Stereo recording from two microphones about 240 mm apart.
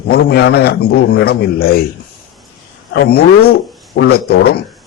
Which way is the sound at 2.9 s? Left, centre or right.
Left.